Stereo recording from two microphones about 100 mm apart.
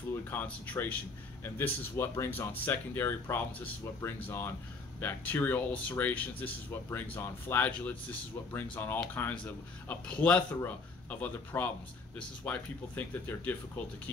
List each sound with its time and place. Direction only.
0.3 s speech: 20° left (ahead or behind)